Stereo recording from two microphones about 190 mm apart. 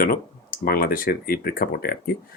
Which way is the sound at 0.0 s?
50° left (ahead or behind).